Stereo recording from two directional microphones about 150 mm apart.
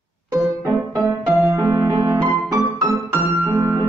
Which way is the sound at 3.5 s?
20° right (ahead or behind).